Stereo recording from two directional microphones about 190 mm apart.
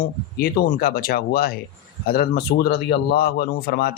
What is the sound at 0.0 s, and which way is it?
A man's voice, 55° left (ahead or behind).